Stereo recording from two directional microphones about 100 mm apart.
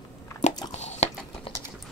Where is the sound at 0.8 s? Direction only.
90° left.